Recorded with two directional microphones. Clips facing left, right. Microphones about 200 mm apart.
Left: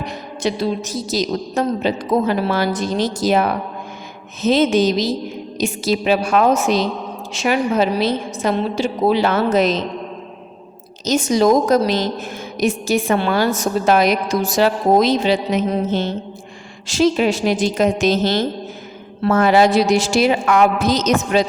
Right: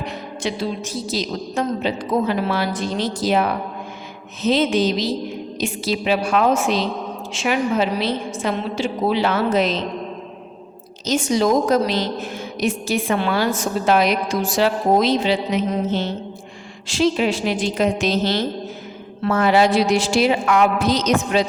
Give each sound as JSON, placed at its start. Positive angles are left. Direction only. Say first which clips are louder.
{"t": 0.0, "sound": "a woman's voice", "louder": "left 3 dB", "side_deg": 40}
{"t": 11.0, "sound": "a woman's voice", "louder": "left 3 dB", "side_deg": 40}